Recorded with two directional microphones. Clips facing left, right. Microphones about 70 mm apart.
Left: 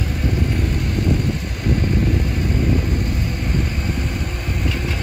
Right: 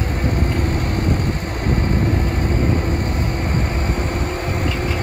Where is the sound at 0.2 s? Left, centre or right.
Right.